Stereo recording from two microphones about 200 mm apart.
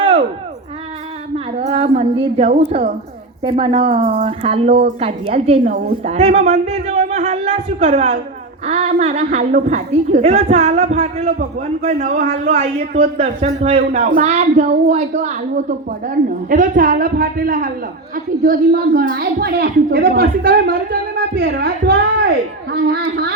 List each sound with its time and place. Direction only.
1.6 s a sound: 30° right (ahead or behind)
2.4 s a man's voice: 30° right (ahead or behind)
8.6 s a man's voice: 30° right (ahead or behind); by 23.3 s 50° right (ahead or behind)